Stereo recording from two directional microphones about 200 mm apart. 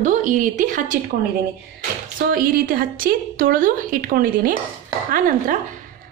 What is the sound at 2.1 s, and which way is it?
A woman's voice, 45° right (ahead or behind).